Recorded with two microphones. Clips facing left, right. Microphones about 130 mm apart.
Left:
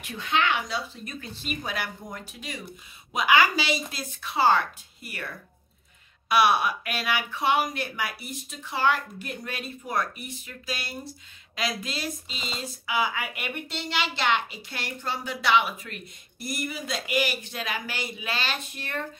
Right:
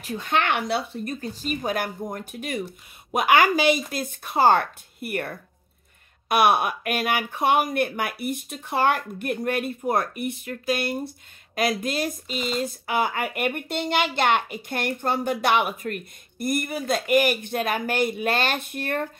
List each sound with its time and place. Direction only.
0.0 s speech: 40° right (ahead or behind); by 1.1 s 60° right (ahead or behind)
1.2 s speech: 40° right (ahead or behind)